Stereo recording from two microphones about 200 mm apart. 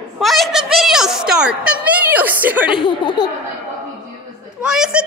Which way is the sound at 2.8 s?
25° left (ahead or behind).